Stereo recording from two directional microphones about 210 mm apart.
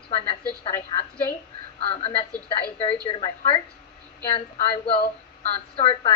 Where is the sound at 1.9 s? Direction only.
25° left (ahead or behind).